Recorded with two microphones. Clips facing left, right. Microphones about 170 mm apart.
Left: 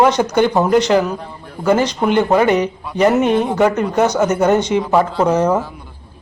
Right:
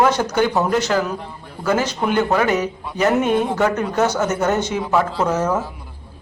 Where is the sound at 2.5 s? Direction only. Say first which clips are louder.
Left 4 dB; centre (ahead or behind).